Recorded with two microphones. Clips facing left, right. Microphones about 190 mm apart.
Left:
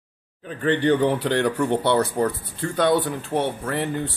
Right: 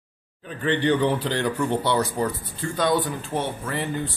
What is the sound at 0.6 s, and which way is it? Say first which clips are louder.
Speech: left 2 dB; 45° left (ahead or behind).